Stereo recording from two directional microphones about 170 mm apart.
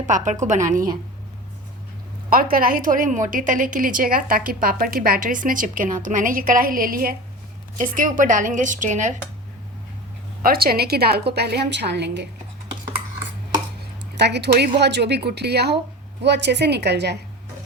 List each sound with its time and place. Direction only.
0.0 s a woman's voice: 45° right (ahead or behind)
2.3 s a woman's voice: 60° right (ahead or behind)
10.4 s a woman's voice: 60° right (ahead or behind); by 12.3 s 85° right
14.2 s a woman's voice: 85° right
16.2 s a woman's voice: 90° right